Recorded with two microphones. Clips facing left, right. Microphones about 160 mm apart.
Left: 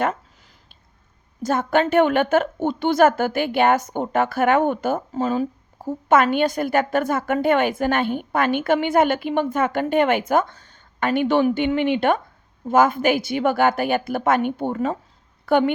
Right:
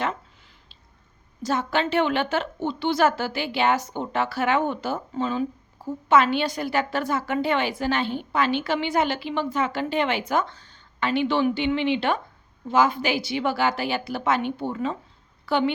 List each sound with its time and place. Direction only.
1.4 s a woman's voice: 50° left (ahead or behind)